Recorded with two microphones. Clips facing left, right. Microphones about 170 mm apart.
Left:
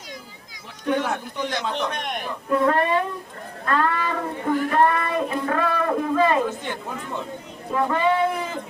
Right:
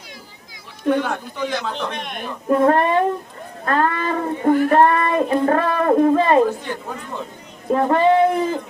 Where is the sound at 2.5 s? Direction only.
45° right (ahead or behind).